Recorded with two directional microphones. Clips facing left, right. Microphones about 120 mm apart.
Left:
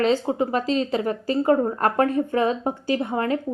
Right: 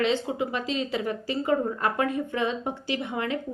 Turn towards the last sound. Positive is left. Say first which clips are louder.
# left 6 dB
turn(degrees=40)  # may be behind; listen again after turning